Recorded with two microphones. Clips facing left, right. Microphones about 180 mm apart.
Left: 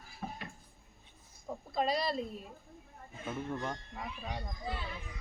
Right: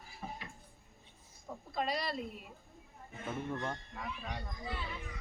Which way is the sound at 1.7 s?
30° left (ahead or behind).